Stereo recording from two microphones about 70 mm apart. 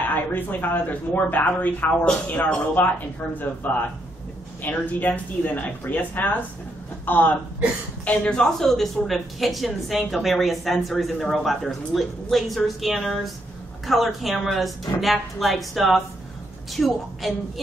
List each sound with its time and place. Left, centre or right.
0.0 s speech: left; by 17.3 s centre